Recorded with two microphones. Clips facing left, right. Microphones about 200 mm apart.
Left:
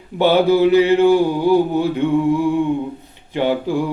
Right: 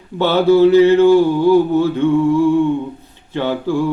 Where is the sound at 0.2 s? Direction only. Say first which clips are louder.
Right 2 dB; 15° left (ahead or behind).